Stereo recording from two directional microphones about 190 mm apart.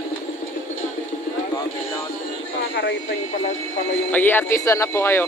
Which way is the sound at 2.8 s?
65° left (ahead or behind).